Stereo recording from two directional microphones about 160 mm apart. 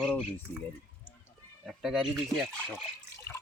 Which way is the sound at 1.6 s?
Centre (ahead or behind).